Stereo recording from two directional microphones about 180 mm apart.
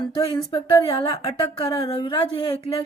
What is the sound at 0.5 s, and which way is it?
Speech, 25° left (ahead or behind).